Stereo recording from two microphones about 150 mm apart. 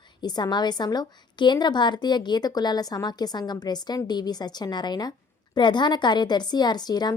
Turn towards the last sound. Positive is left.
turn(degrees=25)  # may be behind; listen again after turning